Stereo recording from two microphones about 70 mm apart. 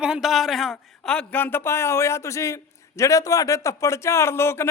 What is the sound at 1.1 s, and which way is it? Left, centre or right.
Speech, centre.